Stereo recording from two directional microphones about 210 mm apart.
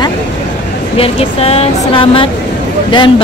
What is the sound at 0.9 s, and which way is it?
Speech, 25° left (ahead or behind).